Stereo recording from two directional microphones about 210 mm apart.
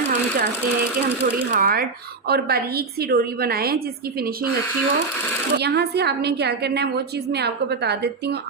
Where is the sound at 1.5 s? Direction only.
45° right (ahead or behind).